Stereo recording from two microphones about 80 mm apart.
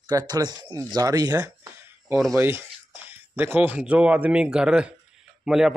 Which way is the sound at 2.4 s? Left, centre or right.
Right.